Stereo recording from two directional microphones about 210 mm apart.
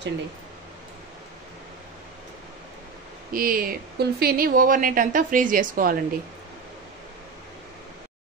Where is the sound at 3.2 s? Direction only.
45° right (ahead or behind).